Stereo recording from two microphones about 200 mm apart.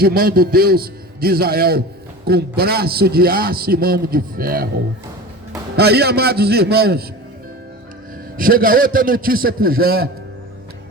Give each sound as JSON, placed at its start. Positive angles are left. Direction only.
{"t": 0.0, "sound": "a man's voice", "side_deg": -50}
{"t": 8.4, "sound": "a man's voice", "side_deg": -45}